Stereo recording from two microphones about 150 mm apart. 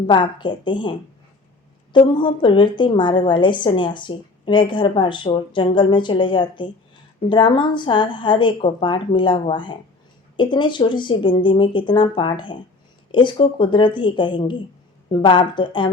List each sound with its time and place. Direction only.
0.1 s a woman's voice: 30° left (ahead or behind)